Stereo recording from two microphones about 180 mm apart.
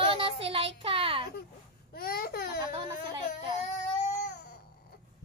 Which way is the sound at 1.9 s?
55° left (ahead or behind).